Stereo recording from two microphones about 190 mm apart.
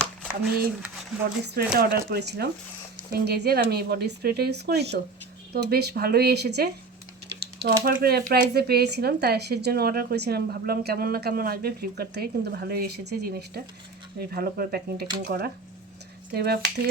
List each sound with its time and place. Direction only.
1.5 s speech: 55° right (ahead or behind)